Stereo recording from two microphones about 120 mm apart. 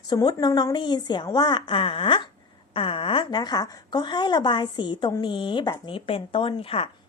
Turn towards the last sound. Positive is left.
turn(degrees=50)  # may be behind; listen again after turning